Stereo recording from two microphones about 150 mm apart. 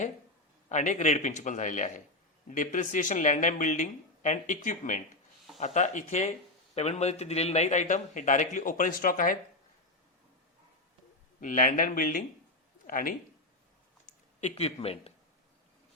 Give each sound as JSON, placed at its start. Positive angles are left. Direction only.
{"t": 0.7, "sound": "a man's voice", "side_deg": 50}
{"t": 11.3, "sound": "speech", "side_deg": 60}
{"t": 14.4, "sound": "a man's voice", "side_deg": 45}